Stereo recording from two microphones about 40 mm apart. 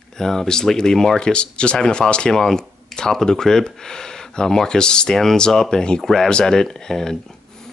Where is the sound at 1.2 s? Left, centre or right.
Left.